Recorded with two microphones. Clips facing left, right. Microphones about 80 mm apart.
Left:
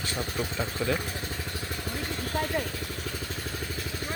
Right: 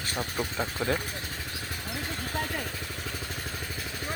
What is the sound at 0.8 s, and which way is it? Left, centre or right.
Speech, right.